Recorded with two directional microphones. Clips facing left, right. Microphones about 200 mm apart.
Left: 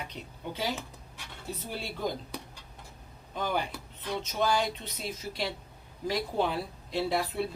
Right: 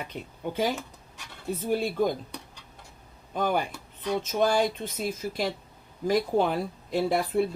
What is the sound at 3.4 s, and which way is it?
Speech, 50° right (ahead or behind).